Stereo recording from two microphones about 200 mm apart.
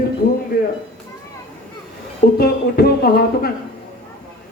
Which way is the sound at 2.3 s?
50° left (ahead or behind).